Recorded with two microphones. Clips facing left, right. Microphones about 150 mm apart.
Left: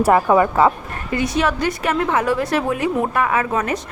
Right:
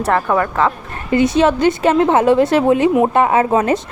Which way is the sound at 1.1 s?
25° right (ahead or behind).